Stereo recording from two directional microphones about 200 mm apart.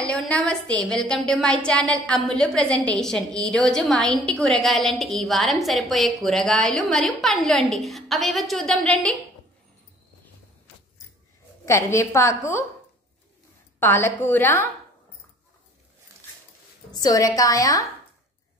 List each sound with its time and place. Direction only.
0.0 s a woman's voice: 5° left (ahead or behind)
11.6 s a woman's voice: 15° left (ahead or behind)
13.7 s a woman's voice: 10° left (ahead or behind)
16.9 s a woman's voice: 20° left (ahead or behind)